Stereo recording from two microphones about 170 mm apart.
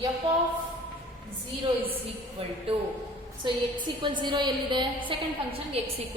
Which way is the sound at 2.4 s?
35° right (ahead or behind).